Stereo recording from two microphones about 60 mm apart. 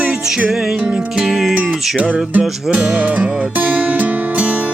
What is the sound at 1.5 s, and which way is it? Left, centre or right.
Music, centre.